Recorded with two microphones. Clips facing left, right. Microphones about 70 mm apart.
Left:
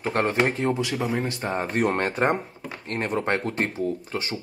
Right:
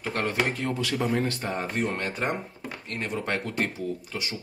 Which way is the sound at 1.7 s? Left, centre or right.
Left.